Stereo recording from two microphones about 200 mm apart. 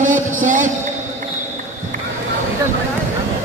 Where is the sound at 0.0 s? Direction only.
40° right (ahead or behind).